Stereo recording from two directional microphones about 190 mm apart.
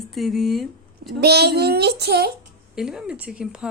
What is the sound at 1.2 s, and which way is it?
Child singing, 60° right (ahead or behind).